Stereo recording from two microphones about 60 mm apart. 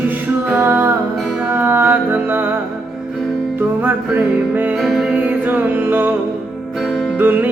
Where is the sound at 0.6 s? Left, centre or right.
Right.